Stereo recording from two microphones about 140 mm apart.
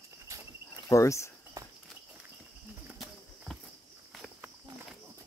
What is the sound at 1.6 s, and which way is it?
Walk, 25° right (ahead or behind).